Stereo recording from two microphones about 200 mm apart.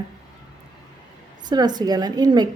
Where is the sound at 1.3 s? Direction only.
20° right (ahead or behind).